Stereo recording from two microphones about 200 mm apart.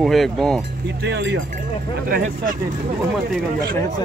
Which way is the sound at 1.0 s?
60° right (ahead or behind).